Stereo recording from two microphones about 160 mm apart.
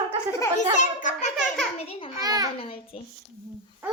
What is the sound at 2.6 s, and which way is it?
Speech, 35° left (ahead or behind).